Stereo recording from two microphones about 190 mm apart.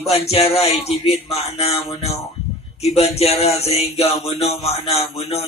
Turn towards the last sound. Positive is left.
turn(degrees=30)  # may be behind; listen again after turning